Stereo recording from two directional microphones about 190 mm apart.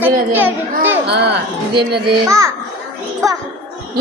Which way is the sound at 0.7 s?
60° right (ahead or behind).